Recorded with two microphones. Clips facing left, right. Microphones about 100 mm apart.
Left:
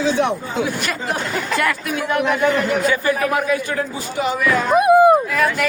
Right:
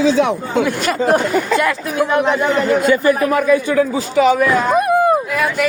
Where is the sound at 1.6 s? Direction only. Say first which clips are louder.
Right 4 dB; 25° right (ahead or behind).